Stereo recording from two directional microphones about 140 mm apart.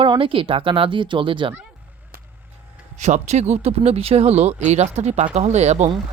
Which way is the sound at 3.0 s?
55° right (ahead or behind).